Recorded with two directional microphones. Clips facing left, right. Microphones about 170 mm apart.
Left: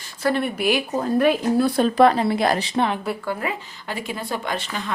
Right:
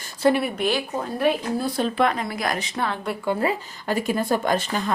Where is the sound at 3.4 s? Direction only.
40° right (ahead or behind).